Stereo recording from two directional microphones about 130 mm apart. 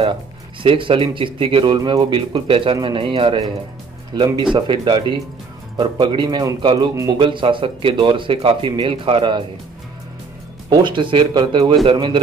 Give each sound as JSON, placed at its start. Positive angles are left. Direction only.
{"t": 0.6, "sound": "speech", "side_deg": -40}
{"t": 10.7, "sound": "speech", "side_deg": -40}